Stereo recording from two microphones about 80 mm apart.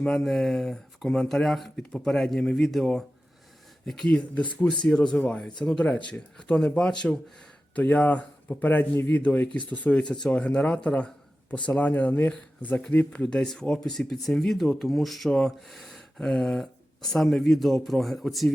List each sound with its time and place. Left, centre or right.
0.0 s speech: centre